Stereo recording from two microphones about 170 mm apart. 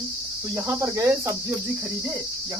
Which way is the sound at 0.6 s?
15° right (ahead or behind).